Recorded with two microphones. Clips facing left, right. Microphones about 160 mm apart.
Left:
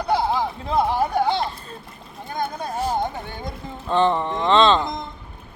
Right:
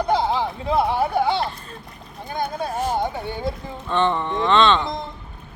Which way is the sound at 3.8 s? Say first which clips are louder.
Left 2 dB; 35° left (ahead or behind).